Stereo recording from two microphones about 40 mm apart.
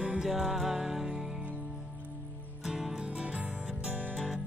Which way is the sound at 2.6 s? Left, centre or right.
Centre.